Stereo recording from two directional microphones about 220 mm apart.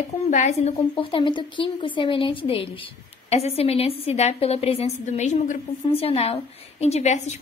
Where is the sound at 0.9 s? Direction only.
25° left (ahead or behind).